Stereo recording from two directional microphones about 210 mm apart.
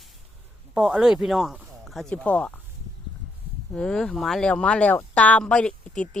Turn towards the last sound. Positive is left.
turn(degrees=5)  # may be behind; listen again after turning